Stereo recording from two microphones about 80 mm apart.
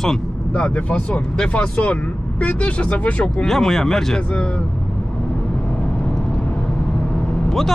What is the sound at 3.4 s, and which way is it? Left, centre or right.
Speech, centre.